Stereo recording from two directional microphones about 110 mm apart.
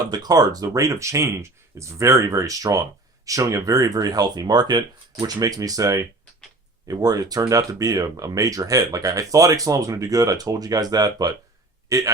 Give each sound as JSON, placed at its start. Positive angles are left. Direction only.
{"t": 0.0, "sound": "a man's voice", "side_deg": -40}